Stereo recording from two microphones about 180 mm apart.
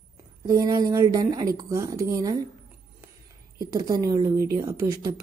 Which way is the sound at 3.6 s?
20° right (ahead or behind).